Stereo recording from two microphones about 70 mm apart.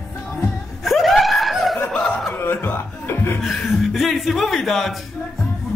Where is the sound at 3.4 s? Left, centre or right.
Centre.